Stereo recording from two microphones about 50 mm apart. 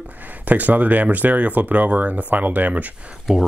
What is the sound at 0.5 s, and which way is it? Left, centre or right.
Speech, right.